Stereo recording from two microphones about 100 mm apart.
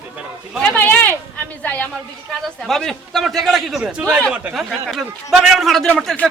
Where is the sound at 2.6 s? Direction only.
5° left (ahead or behind).